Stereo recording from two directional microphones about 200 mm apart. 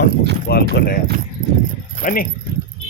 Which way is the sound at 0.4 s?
55° left (ahead or behind).